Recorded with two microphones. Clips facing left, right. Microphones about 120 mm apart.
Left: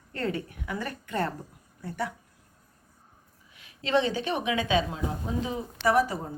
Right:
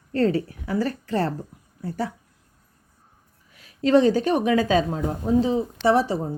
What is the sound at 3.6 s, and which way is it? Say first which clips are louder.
A woman's voice: right 8 dB; 40° right (ahead or behind).